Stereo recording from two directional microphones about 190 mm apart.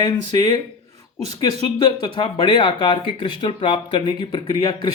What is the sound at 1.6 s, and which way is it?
A man's voice, 25° left (ahead or behind).